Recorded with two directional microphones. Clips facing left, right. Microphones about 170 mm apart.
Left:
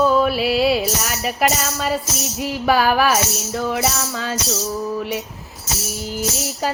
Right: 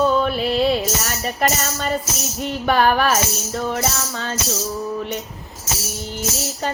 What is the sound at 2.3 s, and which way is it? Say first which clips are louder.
Music: left 1 dB; 5° left (ahead or behind).